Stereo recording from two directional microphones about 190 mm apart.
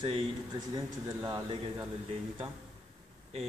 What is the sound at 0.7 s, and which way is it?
Speech, 20° right (ahead or behind).